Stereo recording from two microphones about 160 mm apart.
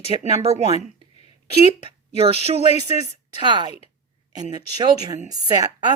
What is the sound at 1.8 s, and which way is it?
Speech, 35° right (ahead or behind).